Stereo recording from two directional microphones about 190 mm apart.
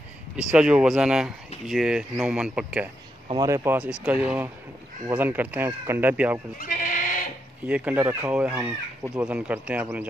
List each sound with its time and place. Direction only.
0.4 s speech: 5° right (ahead or behind)
3.3 s speech: 20° right (ahead or behind)
6.6 s bleat: 45° left (ahead or behind)
7.6 s speech: 5° right (ahead or behind)